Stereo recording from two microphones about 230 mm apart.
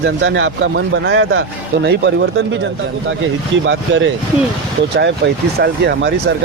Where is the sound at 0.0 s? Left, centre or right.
Right.